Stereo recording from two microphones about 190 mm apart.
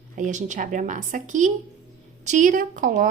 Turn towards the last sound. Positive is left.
turn(degrees=-45)  # may be behind; listen again after turning